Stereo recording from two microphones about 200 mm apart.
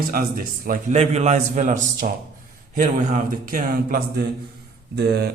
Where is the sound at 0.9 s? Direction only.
35° right (ahead or behind).